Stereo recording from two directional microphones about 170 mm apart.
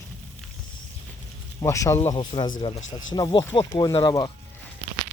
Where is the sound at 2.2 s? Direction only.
25° left (ahead or behind).